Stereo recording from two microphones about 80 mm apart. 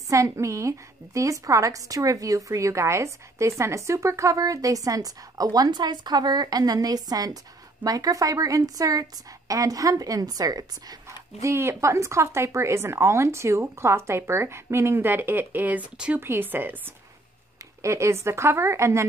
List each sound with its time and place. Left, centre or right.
0.1 s a woman's voice: right
11.4 s speech: right; by 16.2 s centre
16.2 s speech: right
17.8 s speech: right